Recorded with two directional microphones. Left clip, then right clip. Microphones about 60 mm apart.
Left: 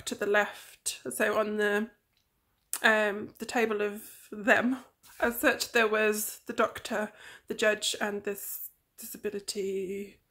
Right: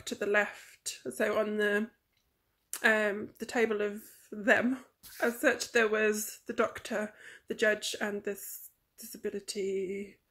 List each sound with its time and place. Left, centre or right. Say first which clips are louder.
0.0 s speech: left 2 dB; left